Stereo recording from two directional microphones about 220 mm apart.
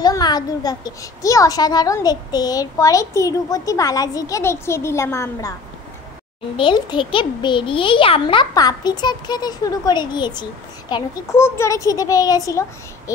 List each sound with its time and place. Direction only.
0.0 s a child's voice: 20° left (ahead or behind)
6.5 s a child's voice: 20° left (ahead or behind)